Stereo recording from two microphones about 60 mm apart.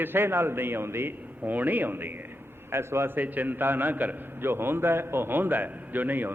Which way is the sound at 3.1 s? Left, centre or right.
Right.